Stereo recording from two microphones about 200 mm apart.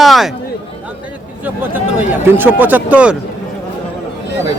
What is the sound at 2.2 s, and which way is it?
Speech, 10° right (ahead or behind).